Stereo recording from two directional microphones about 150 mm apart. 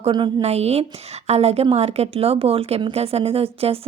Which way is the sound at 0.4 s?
45° right (ahead or behind).